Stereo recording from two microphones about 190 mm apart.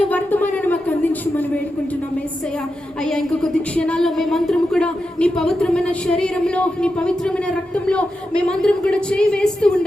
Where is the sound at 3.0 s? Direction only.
Centre (ahead or behind).